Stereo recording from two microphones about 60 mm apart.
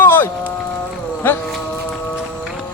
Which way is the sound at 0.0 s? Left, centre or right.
Left.